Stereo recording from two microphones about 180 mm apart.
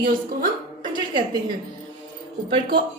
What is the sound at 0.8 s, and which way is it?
Speech, 25° right (ahead or behind).